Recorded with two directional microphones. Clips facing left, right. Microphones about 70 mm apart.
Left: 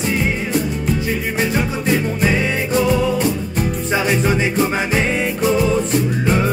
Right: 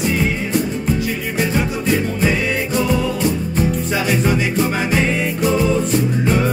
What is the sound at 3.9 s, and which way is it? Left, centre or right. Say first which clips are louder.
Music: left 1 dB; centre.